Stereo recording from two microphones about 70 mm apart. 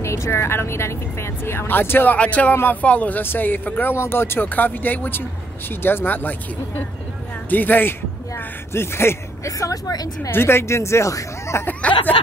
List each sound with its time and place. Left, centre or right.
0.0 s speech: left
8.7 s speech: left
10.3 s speech: left
11.8 s a sound: centre